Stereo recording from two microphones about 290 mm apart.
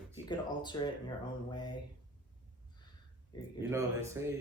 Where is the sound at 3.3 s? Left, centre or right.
Centre.